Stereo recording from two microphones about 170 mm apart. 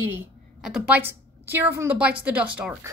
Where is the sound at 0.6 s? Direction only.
5° right (ahead or behind).